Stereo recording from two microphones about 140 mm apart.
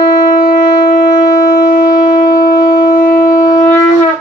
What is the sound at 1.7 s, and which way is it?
Shofar, 90° left.